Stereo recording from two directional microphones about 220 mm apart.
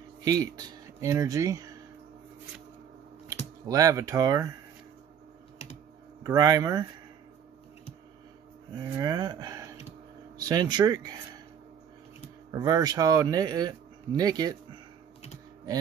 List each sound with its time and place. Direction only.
0.2 s speech: 15° right (ahead or behind)
3.6 s speech: 15° right (ahead or behind)
6.2 s speech: 15° right (ahead or behind)
8.7 s speech: 15° right (ahead or behind)
12.4 s speech: 15° right (ahead or behind)